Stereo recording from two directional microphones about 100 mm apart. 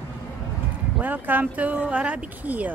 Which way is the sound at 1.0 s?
20° right (ahead or behind).